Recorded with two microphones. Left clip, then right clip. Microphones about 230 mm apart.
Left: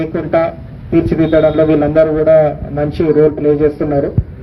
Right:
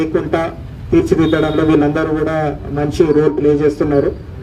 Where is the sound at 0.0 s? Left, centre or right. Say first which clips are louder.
Left 2 dB; right.